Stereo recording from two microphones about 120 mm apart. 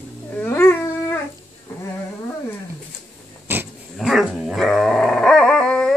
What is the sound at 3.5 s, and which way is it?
Dog, 20° right (ahead or behind).